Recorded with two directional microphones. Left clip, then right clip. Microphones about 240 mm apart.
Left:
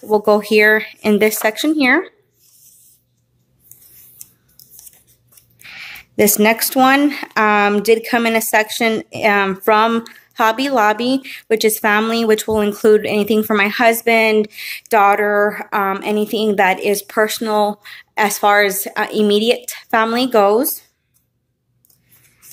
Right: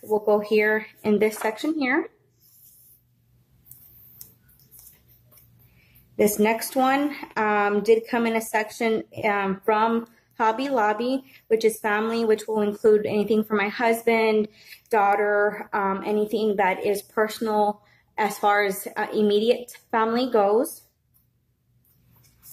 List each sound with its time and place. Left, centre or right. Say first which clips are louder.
0.1 s speech: left 8 dB; left
6.1 s speech: left 7 dB; left